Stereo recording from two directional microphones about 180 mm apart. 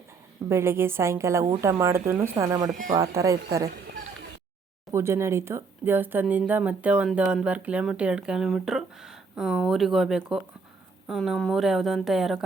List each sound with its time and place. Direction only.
0.4 s speech: 15° right (ahead or behind)
2.7 s speech: 40° right (ahead or behind)
3.2 s speech: 20° right (ahead or behind)
4.9 s speech: 15° right (ahead or behind)